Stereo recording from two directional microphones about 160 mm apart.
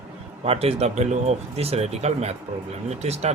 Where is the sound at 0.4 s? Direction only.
40° right (ahead or behind).